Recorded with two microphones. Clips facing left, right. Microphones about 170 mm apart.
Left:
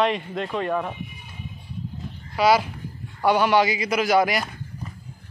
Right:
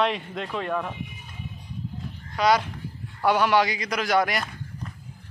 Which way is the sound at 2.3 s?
5° left (ahead or behind).